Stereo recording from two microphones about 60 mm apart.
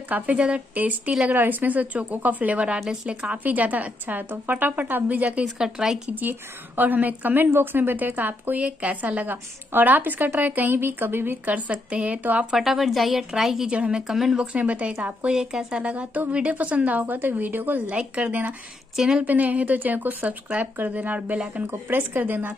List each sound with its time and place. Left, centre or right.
0.1 s a woman's voice: right
5.6 s a woman's voice: centre
6.8 s a woman's voice: right
11.5 s a woman's voice: right
12.5 s a woman's voice: centre
13.7 s a woman's voice: centre
14.0 s a woman's voice: centre
14.4 s a woman's voice: right
15.2 s a woman's voice: centre
15.8 s a woman's voice: right
18.9 s a woman's voice: centre
19.2 s a woman's voice: right